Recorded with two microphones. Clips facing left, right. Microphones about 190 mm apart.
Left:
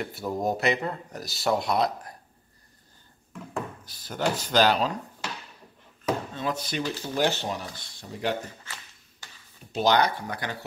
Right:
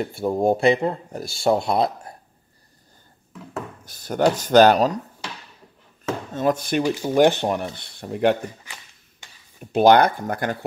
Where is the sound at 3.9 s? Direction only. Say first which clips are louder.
Right 10 dB; 50° right (ahead or behind).